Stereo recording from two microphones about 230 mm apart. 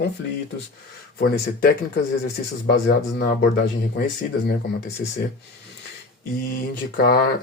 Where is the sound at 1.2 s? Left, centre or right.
Left.